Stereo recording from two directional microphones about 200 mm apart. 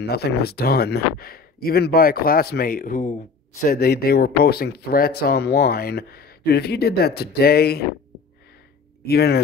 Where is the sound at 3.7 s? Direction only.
50° left (ahead or behind).